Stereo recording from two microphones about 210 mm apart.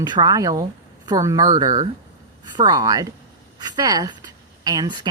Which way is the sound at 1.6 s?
35° right (ahead or behind).